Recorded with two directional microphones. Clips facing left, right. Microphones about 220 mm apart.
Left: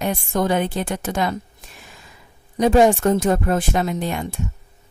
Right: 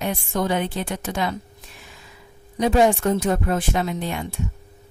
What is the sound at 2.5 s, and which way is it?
Speech, 45° left (ahead or behind).